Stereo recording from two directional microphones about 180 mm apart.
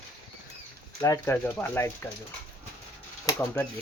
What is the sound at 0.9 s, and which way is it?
Speech, 20° left (ahead or behind).